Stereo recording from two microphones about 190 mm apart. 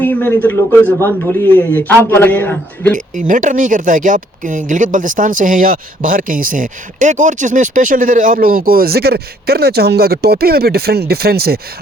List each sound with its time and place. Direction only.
0.0 s a sound: 10° left (ahead or behind)
0.9 s a man's voice: 10° left (ahead or behind)
3.2 s speech: 45° right (ahead or behind)